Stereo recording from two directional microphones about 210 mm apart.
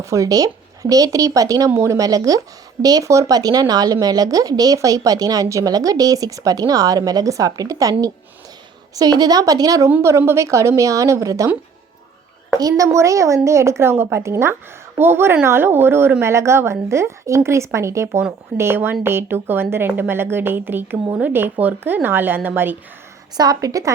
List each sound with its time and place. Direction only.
0.0 s speech: 15° right (ahead or behind)
12.5 s speech: 15° right (ahead or behind)